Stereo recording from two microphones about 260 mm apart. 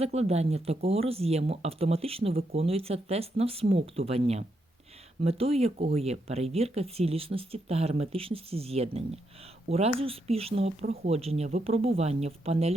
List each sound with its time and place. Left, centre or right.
0.0 s speech: right